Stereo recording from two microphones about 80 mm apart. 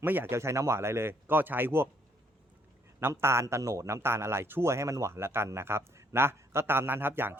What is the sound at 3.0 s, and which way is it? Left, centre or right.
A man's voice, right.